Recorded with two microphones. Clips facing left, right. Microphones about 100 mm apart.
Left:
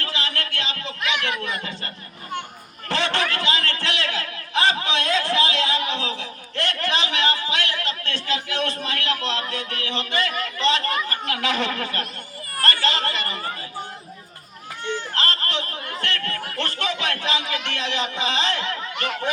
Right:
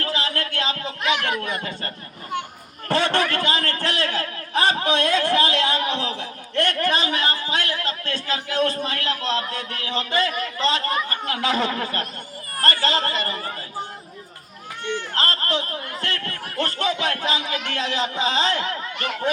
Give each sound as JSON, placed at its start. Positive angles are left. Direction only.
{"t": 0.0, "sound": "a sound", "side_deg": -40}
{"t": 2.9, "sound": "a man's voice", "side_deg": -50}
{"t": 11.1, "sound": "speech", "side_deg": -25}
{"t": 11.4, "sound": "speech", "side_deg": -35}
{"t": 15.2, "sound": "speech", "side_deg": -40}